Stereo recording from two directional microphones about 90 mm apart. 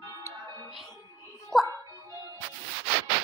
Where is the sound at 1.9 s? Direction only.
40° right (ahead or behind).